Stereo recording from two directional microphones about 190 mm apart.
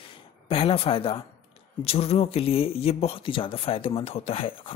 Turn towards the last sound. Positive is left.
turn(degrees=30)  # may be behind; listen again after turning